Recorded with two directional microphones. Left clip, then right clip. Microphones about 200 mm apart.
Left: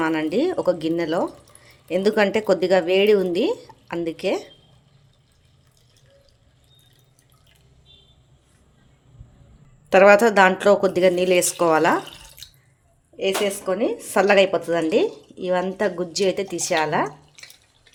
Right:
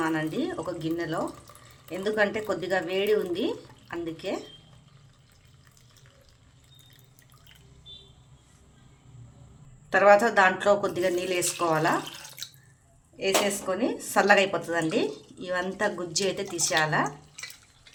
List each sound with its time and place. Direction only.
0.0 s a woman's voice: 40° left (ahead or behind)
9.9 s a woman's voice: 40° left (ahead or behind)
13.1 s a woman's voice: 30° left (ahead or behind)